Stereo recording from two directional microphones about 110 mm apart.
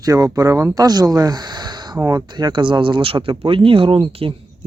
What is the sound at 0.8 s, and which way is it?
Speech, 35° right (ahead or behind).